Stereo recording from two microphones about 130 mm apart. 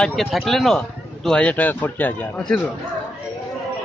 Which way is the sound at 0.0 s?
Centre (ahead or behind).